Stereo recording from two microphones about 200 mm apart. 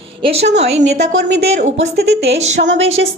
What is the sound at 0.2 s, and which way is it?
Speech, 30° right (ahead or behind).